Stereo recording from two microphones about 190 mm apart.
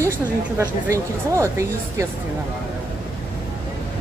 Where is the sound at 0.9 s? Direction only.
15° right (ahead or behind).